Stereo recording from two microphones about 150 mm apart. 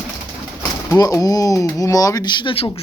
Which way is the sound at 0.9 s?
20° left (ahead or behind).